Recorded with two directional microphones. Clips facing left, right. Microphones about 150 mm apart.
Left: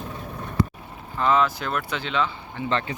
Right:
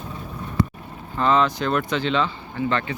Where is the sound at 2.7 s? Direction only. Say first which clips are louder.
Left 1 dB; 30° left (ahead or behind).